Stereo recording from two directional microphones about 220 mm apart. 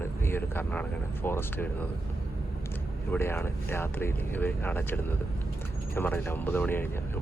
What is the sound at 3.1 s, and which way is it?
Speech, 10° left (ahead or behind).